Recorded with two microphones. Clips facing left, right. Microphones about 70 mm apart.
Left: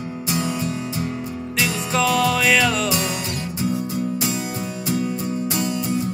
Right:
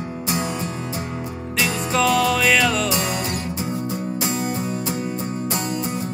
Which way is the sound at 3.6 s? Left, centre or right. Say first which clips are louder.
Left 6 dB; right.